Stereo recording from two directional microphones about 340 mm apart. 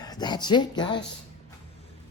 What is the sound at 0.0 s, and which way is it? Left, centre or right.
Speech, centre.